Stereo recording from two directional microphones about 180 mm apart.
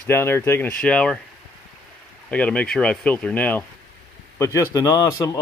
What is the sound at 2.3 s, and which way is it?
Speech, 5° left (ahead or behind).